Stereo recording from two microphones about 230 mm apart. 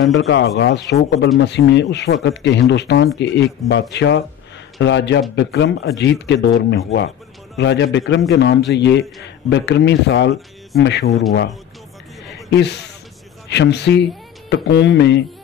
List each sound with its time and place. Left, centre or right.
0.0 s a man's voice: left
12.4 s a man's voice: left